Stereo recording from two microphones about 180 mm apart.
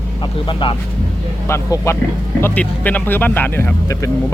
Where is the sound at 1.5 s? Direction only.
15° left (ahead or behind).